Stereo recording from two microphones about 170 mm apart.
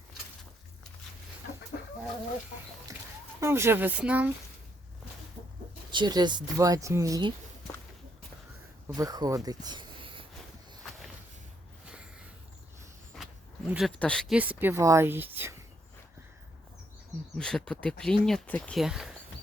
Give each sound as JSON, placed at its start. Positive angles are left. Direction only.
{"t": 3.4, "sound": "a woman's voice", "side_deg": -15}
{"t": 5.9, "sound": "speech", "side_deg": -25}
{"t": 9.0, "sound": "speech", "side_deg": -20}
{"t": 13.7, "sound": "speech", "side_deg": 0}
{"t": 14.3, "sound": "a woman's voice", "side_deg": -10}
{"t": 17.3, "sound": "speech", "side_deg": 5}